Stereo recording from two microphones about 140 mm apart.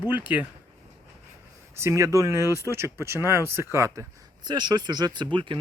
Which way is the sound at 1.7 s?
20° right (ahead or behind).